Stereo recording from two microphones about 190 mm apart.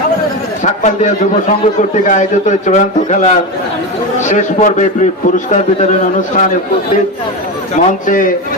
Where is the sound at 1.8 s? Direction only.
40° left (ahead or behind).